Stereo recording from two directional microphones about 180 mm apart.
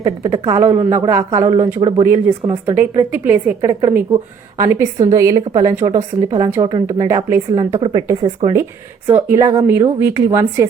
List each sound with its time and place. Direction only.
0.0 s a woman's voice: 20° right (ahead or behind)
3.7 s speech: 20° right (ahead or behind)
9.0 s a woman's voice: 15° right (ahead or behind)